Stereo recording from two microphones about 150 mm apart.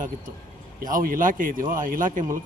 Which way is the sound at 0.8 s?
70° right (ahead or behind).